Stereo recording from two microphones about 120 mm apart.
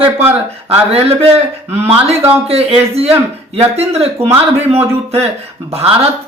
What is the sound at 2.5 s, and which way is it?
Speech, 55° right (ahead or behind).